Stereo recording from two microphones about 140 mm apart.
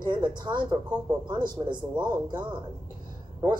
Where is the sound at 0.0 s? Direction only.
35° right (ahead or behind).